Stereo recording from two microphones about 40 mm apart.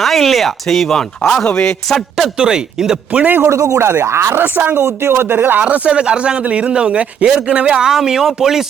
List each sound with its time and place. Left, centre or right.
0.0 s a man's voice: centre
1.9 s speech: centre
2.4 s speech: centre
3.2 s a man's voice: right
3.8 s speech: right
4.5 s speech: right
4.8 s speech: right
5.3 s speech: right
5.7 s speech: right; by 8.6 s centre